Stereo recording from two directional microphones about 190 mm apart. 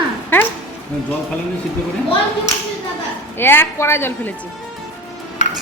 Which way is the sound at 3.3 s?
10° left (ahead or behind).